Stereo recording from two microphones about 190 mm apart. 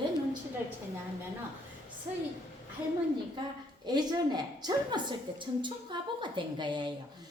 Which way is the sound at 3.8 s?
20° right (ahead or behind).